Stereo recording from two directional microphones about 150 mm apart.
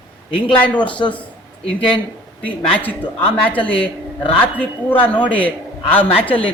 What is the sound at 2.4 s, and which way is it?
A woman's voice, 10° left (ahead or behind).